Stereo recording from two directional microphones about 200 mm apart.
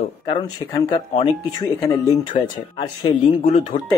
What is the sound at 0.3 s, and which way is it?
A man's voice, 20° left (ahead or behind).